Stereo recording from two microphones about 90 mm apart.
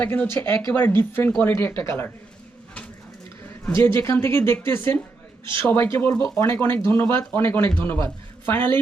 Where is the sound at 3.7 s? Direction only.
30° left (ahead or behind).